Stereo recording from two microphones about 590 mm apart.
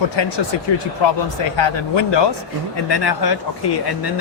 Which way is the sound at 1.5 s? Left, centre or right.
Left.